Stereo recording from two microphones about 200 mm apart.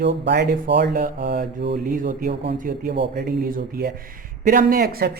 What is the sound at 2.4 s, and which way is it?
A woman's voice, 60° right (ahead or behind).